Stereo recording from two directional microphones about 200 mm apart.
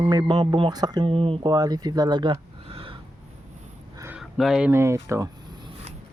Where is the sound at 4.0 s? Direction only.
5° right (ahead or behind).